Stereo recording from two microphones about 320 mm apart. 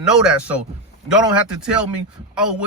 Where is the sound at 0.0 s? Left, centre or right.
Centre.